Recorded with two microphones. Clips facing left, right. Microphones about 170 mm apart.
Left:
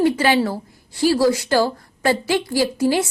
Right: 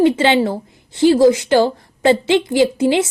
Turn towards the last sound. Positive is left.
turn(degrees=-20)  # may be behind; listen again after turning